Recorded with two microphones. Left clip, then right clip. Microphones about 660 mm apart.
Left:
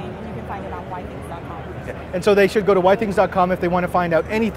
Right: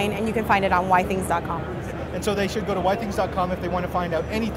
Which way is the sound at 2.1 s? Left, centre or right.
Left.